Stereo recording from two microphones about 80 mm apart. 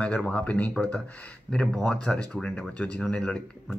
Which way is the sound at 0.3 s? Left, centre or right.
Centre.